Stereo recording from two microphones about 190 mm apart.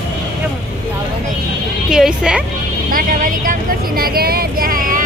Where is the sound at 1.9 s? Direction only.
5° right (ahead or behind).